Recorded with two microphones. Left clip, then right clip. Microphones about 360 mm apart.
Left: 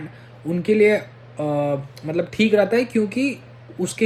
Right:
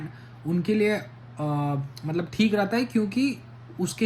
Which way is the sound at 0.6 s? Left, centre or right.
Centre.